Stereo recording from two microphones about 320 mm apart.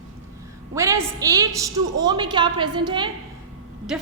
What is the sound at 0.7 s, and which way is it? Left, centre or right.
A woman's voice, centre.